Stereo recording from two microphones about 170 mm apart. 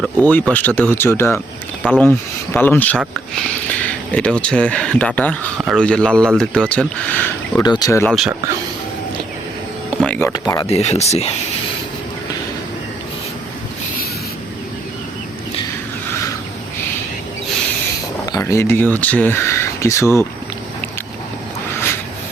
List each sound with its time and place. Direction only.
0.0 s speech: 10° left (ahead or behind)
7.6 s speech: 25° left (ahead or behind)
10.0 s a sound: 10° left (ahead or behind)
10.3 s speech: 25° left (ahead or behind)
10.7 s speech: 40° left (ahead or behind)
18.3 s speech: 20° left (ahead or behind)